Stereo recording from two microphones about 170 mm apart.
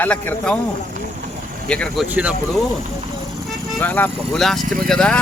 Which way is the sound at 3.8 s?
10° left (ahead or behind).